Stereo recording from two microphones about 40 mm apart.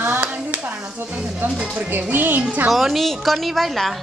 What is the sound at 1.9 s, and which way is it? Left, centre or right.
Speech, right.